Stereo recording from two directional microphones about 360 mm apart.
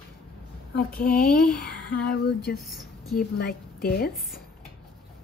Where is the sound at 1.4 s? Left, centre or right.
Centre.